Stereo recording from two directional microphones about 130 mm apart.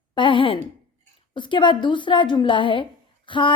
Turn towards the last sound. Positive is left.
turn(degrees=40)  # may be behind; listen again after turning